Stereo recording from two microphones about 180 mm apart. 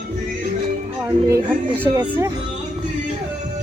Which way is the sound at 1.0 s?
15° right (ahead or behind).